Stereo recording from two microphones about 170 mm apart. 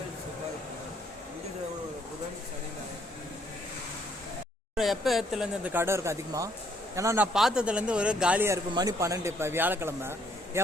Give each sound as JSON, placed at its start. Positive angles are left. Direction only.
{"t": 4.8, "sound": "a man's voice", "side_deg": 0}
{"t": 7.3, "sound": "a man's voice", "side_deg": -5}